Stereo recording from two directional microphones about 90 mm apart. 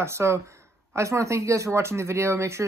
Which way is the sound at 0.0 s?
30° right (ahead or behind).